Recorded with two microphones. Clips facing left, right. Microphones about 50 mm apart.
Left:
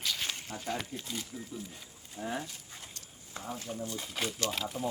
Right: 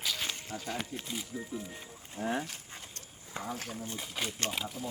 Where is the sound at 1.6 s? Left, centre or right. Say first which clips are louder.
Right 2 dB; right.